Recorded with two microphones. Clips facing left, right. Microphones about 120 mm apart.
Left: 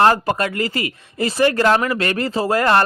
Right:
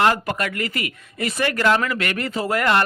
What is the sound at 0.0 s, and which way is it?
Speech, 30° left (ahead or behind).